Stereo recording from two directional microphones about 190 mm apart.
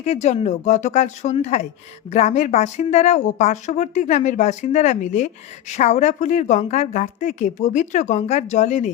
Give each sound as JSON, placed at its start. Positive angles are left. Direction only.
{"t": 0.0, "sound": "speech", "side_deg": 35}